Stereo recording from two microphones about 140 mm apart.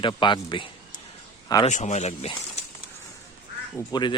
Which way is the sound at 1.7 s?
55° left (ahead or behind).